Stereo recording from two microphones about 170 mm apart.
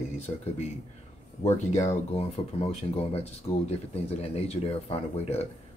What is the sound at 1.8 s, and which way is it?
Speech, 40° left (ahead or behind).